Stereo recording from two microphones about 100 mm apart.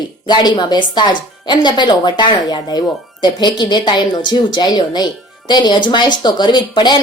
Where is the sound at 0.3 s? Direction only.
50° left (ahead or behind).